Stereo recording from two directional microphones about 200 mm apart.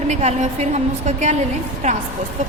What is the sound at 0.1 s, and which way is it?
A woman's voice, 35° right (ahead or behind).